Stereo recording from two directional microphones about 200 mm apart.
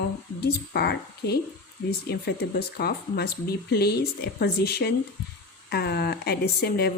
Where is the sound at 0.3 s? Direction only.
55° left (ahead or behind).